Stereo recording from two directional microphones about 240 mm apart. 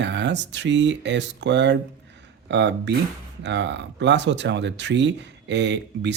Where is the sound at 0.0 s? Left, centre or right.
Right.